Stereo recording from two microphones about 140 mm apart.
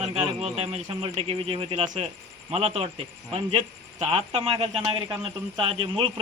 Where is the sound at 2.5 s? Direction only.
45° right (ahead or behind).